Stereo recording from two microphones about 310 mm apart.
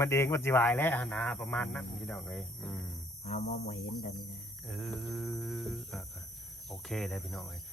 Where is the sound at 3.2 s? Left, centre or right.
Left.